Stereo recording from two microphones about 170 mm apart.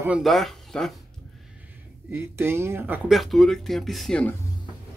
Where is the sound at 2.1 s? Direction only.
15° right (ahead or behind); by 4.3 s 5° left (ahead or behind).